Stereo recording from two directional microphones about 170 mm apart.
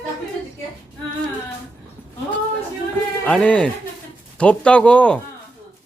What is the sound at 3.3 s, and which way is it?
A man's voice, 5° left (ahead or behind).